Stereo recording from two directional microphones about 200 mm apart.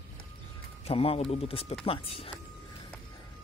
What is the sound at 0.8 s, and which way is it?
Speech, 30° left (ahead or behind).